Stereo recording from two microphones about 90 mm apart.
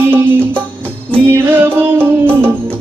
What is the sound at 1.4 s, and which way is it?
Music, 25° right (ahead or behind).